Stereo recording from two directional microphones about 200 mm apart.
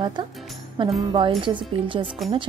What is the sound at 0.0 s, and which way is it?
Speech, 25° right (ahead or behind).